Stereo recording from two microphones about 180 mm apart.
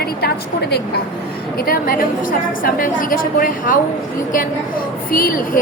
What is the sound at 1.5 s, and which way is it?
A woman's voice, 55° left (ahead or behind).